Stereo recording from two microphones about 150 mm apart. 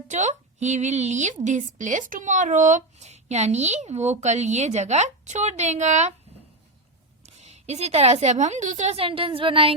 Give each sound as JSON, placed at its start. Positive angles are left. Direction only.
{"t": 0.1, "sound": "speech", "side_deg": -55}
{"t": 7.3, "sound": "speech", "side_deg": -45}